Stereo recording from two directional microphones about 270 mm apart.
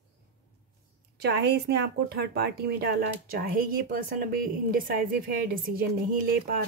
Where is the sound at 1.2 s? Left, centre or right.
Right.